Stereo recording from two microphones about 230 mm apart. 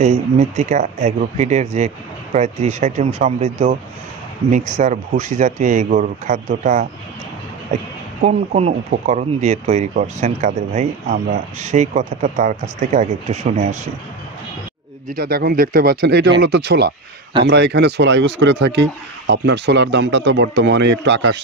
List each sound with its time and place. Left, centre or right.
0.0 s speech: right
8.2 s speech: right
15.1 s speech: right